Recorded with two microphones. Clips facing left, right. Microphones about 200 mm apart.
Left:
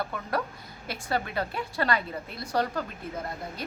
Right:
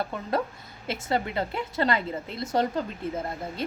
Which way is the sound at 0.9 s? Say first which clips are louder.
Right 3 dB; 25° right (ahead or behind).